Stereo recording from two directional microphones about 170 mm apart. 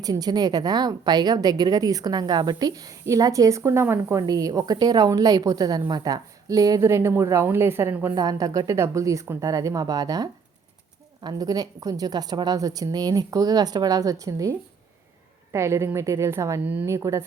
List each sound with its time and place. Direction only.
0.0 s a woman's voice: 25° right (ahead or behind)
15.5 s a woman's voice: 15° right (ahead or behind)